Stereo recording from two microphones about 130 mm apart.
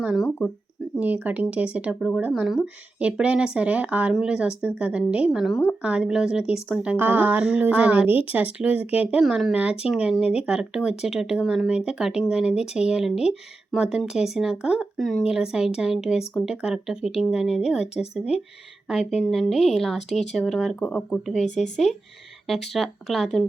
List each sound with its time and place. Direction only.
0.0 s speech: 5° right (ahead or behind)
0.3 s speech: 10° left (ahead or behind)
0.9 s speech: 10° right (ahead or behind)
9.2 s speech: centre (ahead or behind)
9.5 s speech: 10° right (ahead or behind)
18.9 s speech: centre (ahead or behind)
20.8 s speech: 10° left (ahead or behind)
21.4 s speech: 65° left (ahead or behind)
22.4 s speech: centre (ahead or behind)